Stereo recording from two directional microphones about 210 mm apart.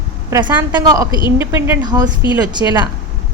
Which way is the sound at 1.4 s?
10° right (ahead or behind).